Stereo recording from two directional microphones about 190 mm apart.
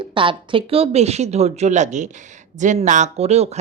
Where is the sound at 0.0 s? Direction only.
25° right (ahead or behind).